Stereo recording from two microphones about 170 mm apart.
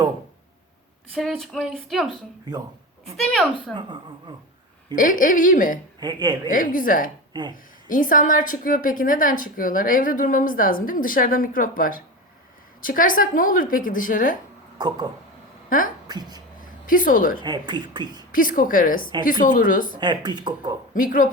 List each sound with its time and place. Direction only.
1.1 s speech: centre (ahead or behind)
3.8 s speech: 25° right (ahead or behind)
4.9 s speech: 50° left (ahead or behind)
6.0 s speech: 25° right (ahead or behind)
6.5 s speech: 55° left (ahead or behind)
14.8 s speech: 25° right (ahead or behind)
16.8 s a woman's voice: 55° left (ahead or behind)
17.4 s speech: 25° right (ahead or behind)
18.3 s speech: 55° left (ahead or behind)
20.0 s speech: 25° right (ahead or behind)
20.9 s speech: 55° left (ahead or behind)